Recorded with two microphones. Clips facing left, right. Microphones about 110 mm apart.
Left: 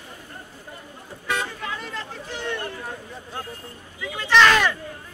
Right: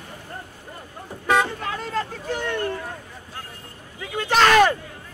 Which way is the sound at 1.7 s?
40° right (ahead or behind).